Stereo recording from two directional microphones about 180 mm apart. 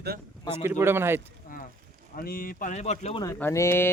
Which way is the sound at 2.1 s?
55° left (ahead or behind).